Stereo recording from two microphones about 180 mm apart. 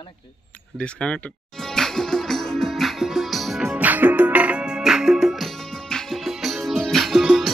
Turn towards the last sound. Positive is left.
turn(degrees=0)  # may be behind; listen again after turning